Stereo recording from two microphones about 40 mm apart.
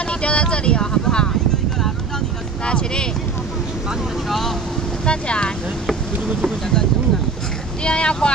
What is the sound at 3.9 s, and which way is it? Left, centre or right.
Speech, centre.